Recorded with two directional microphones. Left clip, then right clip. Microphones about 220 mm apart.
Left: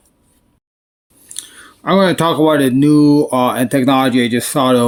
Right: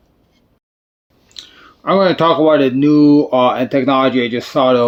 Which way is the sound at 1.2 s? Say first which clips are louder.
Left 2 dB; 50° left (ahead or behind).